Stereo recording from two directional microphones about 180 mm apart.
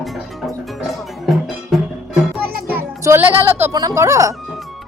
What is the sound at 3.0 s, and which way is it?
Music, 10° right (ahead or behind).